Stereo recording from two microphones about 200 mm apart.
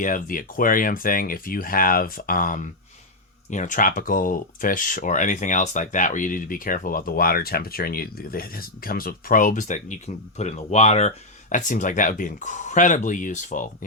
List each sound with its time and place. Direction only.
0.0 s speech: 40° left (ahead or behind)